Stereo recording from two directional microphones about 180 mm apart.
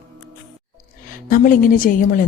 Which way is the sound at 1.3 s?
50° left (ahead or behind).